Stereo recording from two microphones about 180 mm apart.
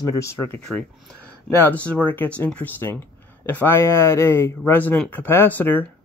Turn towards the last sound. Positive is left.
turn(degrees=10)  # may be behind; listen again after turning